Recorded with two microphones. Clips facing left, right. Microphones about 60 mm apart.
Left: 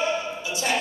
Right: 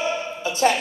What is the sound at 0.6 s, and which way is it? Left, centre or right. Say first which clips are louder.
Speech: right 7 dB; right.